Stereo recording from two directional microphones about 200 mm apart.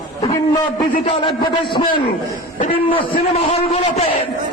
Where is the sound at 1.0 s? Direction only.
25° left (ahead or behind).